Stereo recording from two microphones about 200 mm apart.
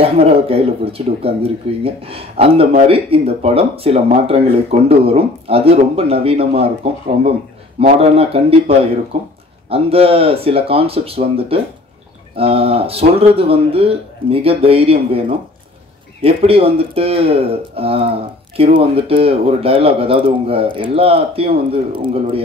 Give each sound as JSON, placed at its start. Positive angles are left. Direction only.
{"t": 0.0, "sound": "speech", "side_deg": -30}